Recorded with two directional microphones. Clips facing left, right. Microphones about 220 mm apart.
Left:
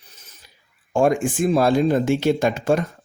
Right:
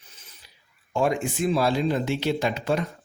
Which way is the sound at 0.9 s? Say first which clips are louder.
Left 6 dB; 50° left (ahead or behind).